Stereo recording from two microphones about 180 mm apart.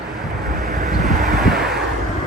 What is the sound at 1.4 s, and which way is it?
Vehicle, centre (ahead or behind).